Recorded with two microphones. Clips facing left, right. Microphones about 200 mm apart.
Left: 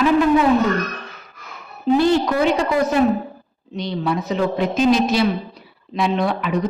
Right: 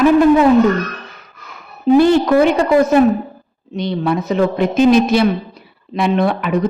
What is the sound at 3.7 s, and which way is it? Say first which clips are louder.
A woman's voice: right 4 dB; 55° right (ahead or behind).